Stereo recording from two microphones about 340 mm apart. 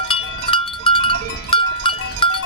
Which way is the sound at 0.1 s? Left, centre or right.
Centre.